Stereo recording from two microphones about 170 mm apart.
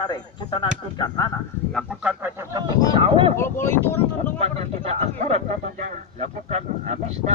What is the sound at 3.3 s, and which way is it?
Speech, 15° left (ahead or behind).